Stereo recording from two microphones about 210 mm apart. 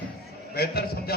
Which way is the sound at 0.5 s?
50° left (ahead or behind).